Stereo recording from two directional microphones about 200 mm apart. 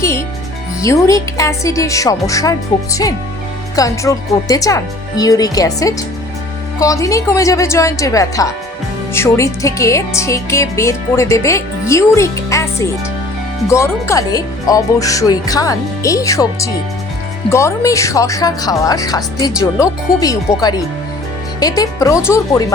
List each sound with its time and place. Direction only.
0.0 s speech: 15° left (ahead or behind)